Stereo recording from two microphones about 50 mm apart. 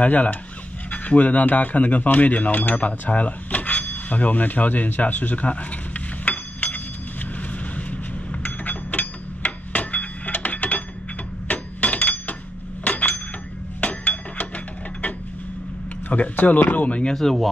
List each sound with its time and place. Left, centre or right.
0.0 s speech: left
8.3 s a sound: left
16.1 s speech: left
17.1 s speech: centre